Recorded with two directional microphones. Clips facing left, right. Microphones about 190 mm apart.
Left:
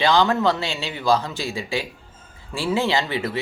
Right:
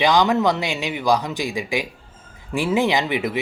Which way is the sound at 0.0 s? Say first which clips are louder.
Right 1 dB; 15° right (ahead or behind).